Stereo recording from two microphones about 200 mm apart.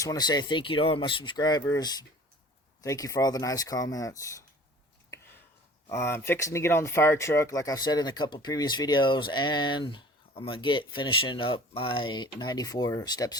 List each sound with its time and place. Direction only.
0.0 s speech: 20° left (ahead or behind)
5.9 s speech: 10° left (ahead or behind)